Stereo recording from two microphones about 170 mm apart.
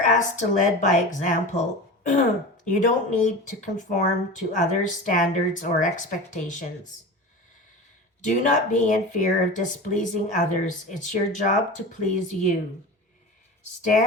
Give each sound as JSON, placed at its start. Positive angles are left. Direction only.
{"t": 0.0, "sound": "speech", "side_deg": 45}
{"t": 2.6, "sound": "speech", "side_deg": 45}
{"t": 8.2, "sound": "speech", "side_deg": 45}